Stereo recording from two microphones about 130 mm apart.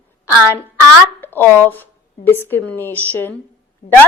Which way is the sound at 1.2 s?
15° left (ahead or behind).